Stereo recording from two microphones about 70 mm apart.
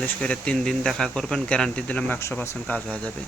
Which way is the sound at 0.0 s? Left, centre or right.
Centre.